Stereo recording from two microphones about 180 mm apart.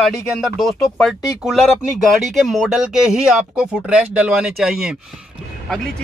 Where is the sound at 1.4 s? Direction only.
Centre (ahead or behind).